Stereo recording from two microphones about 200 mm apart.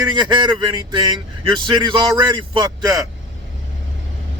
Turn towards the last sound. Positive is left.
turn(degrees=-20)  # may be behind; listen again after turning